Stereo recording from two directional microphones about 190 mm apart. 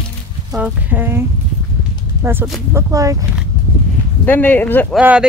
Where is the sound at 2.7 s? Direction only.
15° right (ahead or behind).